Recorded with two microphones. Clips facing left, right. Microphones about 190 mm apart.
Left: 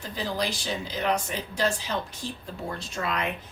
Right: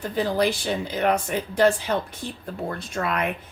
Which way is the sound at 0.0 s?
55° right (ahead or behind).